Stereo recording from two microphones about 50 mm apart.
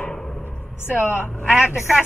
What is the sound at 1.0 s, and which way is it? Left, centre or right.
A man's voice, right.